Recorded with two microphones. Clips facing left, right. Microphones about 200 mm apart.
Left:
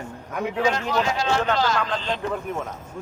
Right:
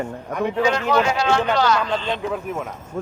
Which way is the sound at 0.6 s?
70° right (ahead or behind).